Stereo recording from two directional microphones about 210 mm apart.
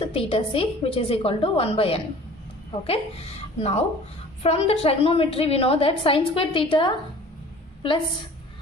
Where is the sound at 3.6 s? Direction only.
30° left (ahead or behind).